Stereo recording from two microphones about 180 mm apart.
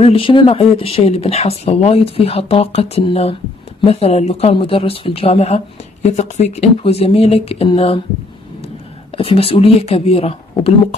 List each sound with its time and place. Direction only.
0.0 s speech: 30° left (ahead or behind)
9.1 s speech: 30° left (ahead or behind)